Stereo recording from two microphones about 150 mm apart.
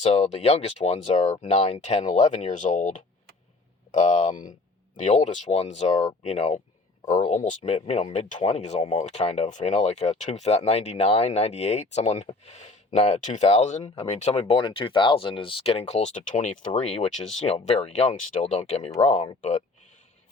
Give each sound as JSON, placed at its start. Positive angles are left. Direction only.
{"t": 0.0, "sound": "speech", "side_deg": 45}